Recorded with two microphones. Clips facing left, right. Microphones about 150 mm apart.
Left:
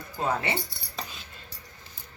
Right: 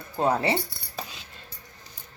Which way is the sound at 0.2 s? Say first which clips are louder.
Right 5 dB; 35° right (ahead or behind).